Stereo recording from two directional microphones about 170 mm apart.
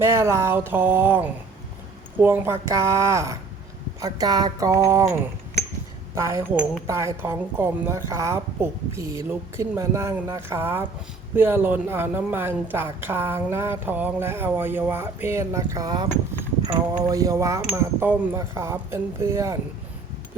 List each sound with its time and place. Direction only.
0.0 s a woman's voice: 15° right (ahead or behind)